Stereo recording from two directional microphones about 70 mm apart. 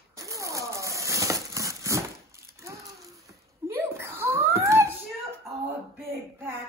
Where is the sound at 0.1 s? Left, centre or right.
Right.